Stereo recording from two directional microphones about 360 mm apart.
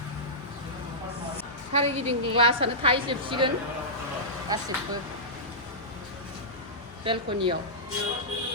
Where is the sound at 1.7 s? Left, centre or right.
Centre.